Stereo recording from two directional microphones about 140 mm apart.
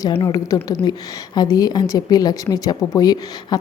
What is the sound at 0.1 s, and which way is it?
A woman's voice, 35° left (ahead or behind).